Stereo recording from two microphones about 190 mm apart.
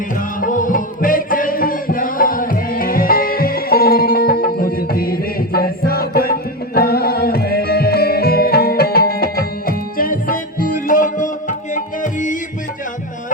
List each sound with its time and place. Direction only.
0.2 s music: 45° left (ahead or behind)